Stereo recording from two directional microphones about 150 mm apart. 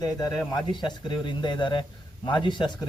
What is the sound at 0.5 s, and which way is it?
A man's voice, 30° left (ahead or behind).